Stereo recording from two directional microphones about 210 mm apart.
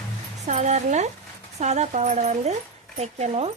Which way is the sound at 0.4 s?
35° right (ahead or behind).